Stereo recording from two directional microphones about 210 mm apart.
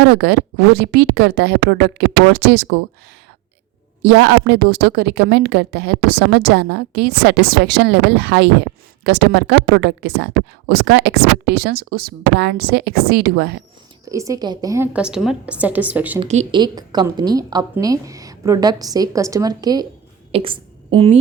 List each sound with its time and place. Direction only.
0.0 s a woman's voice: 50° right (ahead or behind)
4.0 s a woman's voice: 50° right (ahead or behind)
14.0 s a woman's voice: 15° right (ahead or behind)
16.2 s speech: 30° right (ahead or behind)
16.6 s a woman's voice: 20° right (ahead or behind)